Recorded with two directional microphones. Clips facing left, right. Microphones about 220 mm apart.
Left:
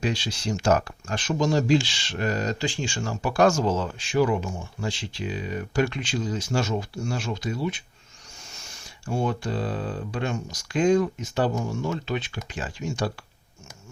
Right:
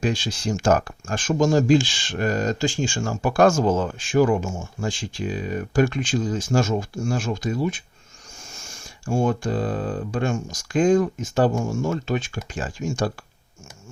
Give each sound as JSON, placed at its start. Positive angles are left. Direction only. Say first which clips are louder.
{"t": 0.0, "sound": "speech", "louder": "right 3 dB", "side_deg": -50}